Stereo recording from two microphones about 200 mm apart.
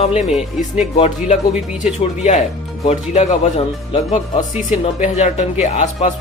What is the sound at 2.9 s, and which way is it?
Speech, 35° left (ahead or behind).